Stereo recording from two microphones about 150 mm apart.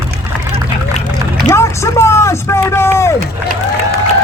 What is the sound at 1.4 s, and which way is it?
Speech, 20° left (ahead or behind).